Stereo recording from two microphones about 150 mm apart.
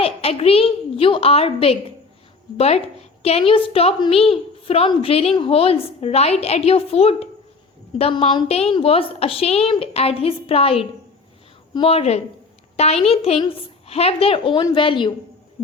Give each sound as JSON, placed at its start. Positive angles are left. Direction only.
{"t": 0.0, "sound": "a woman's voice", "side_deg": 40}